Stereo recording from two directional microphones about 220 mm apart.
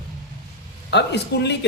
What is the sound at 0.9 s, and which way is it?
Speech, 50° left (ahead or behind).